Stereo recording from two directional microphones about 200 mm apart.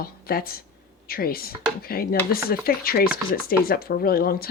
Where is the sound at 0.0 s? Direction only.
50° left (ahead or behind).